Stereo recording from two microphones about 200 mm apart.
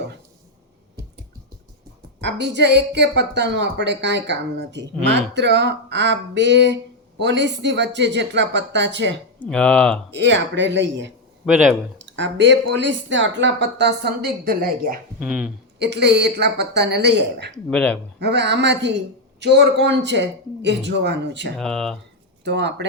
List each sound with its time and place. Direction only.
2.2 s speech: 60° right (ahead or behind)
9.4 s speech: 5° left (ahead or behind)
10.1 s speech: 60° right (ahead or behind); by 14.9 s 45° right (ahead or behind)
15.2 s speech: 5° right (ahead or behind)
15.8 s speech: 60° right (ahead or behind)
17.5 s speech: 5° left (ahead or behind)
18.2 s speech: 55° right (ahead or behind)
21.6 s speech: centre (ahead or behind)
22.4 s speech: 60° right (ahead or behind)